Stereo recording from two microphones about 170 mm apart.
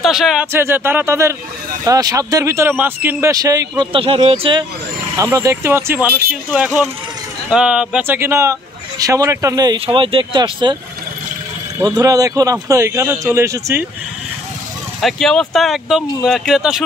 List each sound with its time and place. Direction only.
0.0 s speech: centre (ahead or behind)
0.5 s speech: 15° right (ahead or behind); by 4.6 s 30° right (ahead or behind)
5.1 s speech: 20° right (ahead or behind)
9.8 s speech: 30° right (ahead or behind)
11.8 s speech: 20° right (ahead or behind)
15.0 s speech: centre (ahead or behind)